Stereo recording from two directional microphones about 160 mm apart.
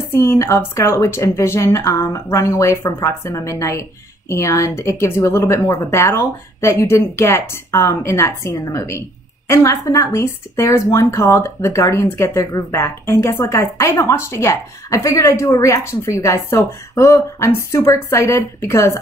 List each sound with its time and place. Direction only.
0.1 s speech: 15° left (ahead or behind)